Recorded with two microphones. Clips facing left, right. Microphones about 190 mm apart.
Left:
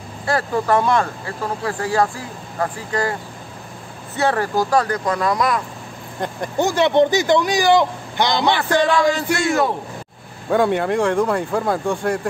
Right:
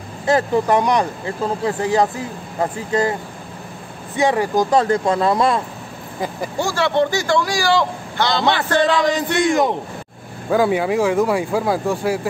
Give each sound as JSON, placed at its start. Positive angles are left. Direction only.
{"t": 0.3, "sound": "speech", "side_deg": -20}
{"t": 4.2, "sound": "speech", "side_deg": -15}
{"t": 6.1, "sound": "speech", "side_deg": -5}
{"t": 6.6, "sound": "speech", "side_deg": 20}
{"t": 8.8, "sound": "speech", "side_deg": -20}
{"t": 10.5, "sound": "speech", "side_deg": -5}